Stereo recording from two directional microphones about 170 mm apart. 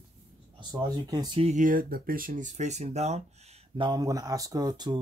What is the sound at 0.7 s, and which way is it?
Speech, 25° right (ahead or behind).